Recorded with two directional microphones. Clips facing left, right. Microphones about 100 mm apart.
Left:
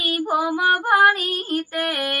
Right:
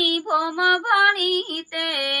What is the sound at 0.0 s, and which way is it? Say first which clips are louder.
Female singing: even; 30° left (ahead or behind).